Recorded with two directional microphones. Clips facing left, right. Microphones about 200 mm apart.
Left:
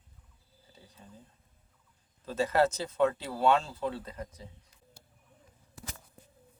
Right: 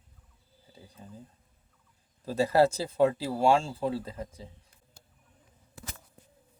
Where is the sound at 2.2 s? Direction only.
35° right (ahead or behind).